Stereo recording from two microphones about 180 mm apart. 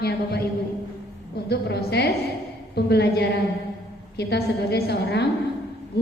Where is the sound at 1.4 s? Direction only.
60° left (ahead or behind).